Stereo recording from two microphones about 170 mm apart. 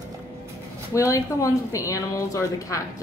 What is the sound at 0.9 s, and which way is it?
Speech, 20° left (ahead or behind).